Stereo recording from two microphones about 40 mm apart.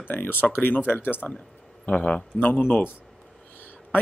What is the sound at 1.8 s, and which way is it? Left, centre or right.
Speech, left.